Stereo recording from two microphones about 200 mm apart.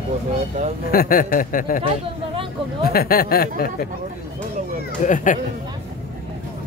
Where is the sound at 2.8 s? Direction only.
50° left (ahead or behind).